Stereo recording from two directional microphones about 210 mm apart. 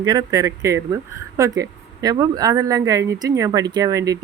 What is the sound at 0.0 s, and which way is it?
Speech, 15° right (ahead or behind).